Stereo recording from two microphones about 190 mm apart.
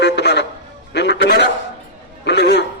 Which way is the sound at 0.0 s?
65° left (ahead or behind).